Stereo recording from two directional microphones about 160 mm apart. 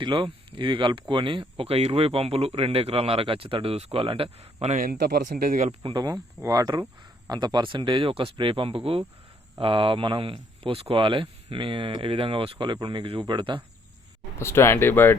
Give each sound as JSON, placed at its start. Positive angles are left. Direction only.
{"t": 0.0, "sound": "speech", "side_deg": -30}
{"t": 4.9, "sound": "speech", "side_deg": -80}
{"t": 5.2, "sound": "speech", "side_deg": -55}
{"t": 5.8, "sound": "speech", "side_deg": -25}
{"t": 14.3, "sound": "speech", "side_deg": 15}